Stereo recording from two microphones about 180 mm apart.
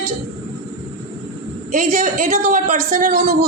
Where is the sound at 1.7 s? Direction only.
45° right (ahead or behind).